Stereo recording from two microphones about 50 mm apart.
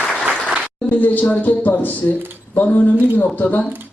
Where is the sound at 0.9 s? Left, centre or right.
Left.